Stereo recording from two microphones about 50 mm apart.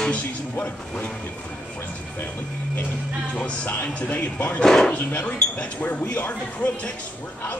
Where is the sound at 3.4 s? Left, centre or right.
Left.